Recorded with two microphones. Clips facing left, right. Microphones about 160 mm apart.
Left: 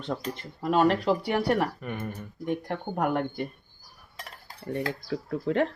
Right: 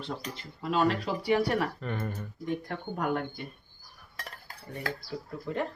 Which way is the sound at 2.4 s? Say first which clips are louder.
Left 4 dB; 60° left (ahead or behind).